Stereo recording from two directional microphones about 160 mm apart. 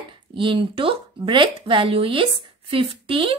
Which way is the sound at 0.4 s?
35° right (ahead or behind).